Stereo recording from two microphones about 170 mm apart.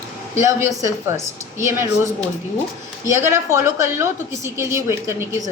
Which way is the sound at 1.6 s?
15° right (ahead or behind).